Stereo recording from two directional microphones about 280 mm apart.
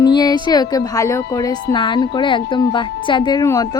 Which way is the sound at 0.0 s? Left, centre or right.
Centre.